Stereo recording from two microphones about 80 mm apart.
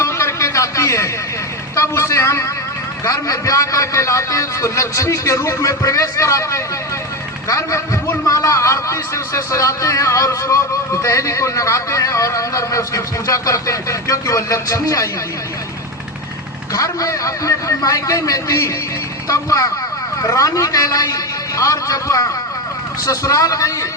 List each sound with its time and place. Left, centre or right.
0.0 s a sound: left
3.0 s a man's voice: left
16.7 s a man's voice: left